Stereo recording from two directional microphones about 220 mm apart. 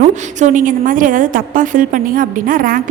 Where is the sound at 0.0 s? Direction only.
35° right (ahead or behind).